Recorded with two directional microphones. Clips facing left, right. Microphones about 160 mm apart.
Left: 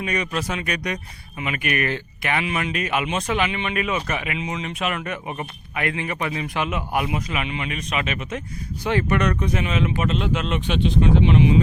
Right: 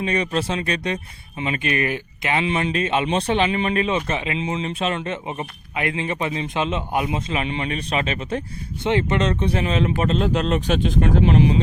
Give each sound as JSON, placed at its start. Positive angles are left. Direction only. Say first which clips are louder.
{"t": 0.0, "sound": "speech", "louder": "right 3 dB", "side_deg": -30}
{"t": 8.9, "sound": "speech", "louder": "right 1 dB", "side_deg": -20}